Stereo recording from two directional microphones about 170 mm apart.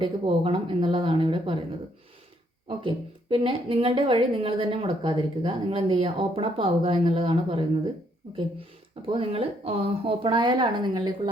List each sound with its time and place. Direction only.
0.0 s speech: 30° right (ahead or behind)
2.6 s a woman's voice: 30° right (ahead or behind)